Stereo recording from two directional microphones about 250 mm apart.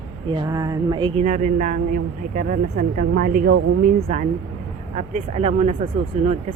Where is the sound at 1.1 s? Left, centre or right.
Right.